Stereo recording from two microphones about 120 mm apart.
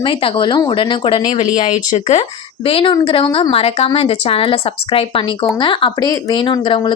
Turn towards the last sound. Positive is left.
turn(degrees=40)  # may be behind; listen again after turning